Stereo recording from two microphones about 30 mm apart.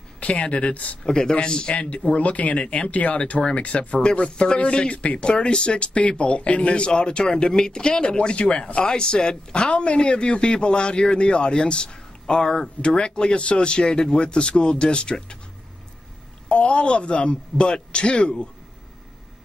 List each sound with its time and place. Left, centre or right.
0.2 s speech: left
1.0 s a man's voice: left
2.6 s a man's voice: left
2.9 s speech: left
3.5 s a man's voice: left
5.2 s a man's voice: left
16.4 s a man's voice: left